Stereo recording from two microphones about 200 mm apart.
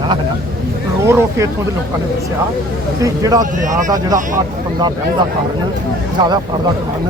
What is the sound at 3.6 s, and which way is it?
Speech, 40° right (ahead or behind).